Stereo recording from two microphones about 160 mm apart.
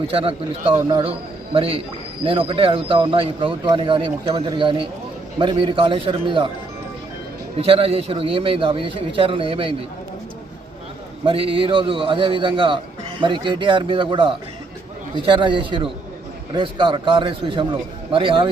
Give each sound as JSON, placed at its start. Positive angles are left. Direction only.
{"t": 0.1, "sound": "a man's voice", "side_deg": -35}
{"t": 0.6, "sound": "speech", "side_deg": -20}
{"t": 1.5, "sound": "a man's voice", "side_deg": -35}
{"t": 7.6, "sound": "a man's voice", "side_deg": -35}
{"t": 11.3, "sound": "a man's voice", "side_deg": -35}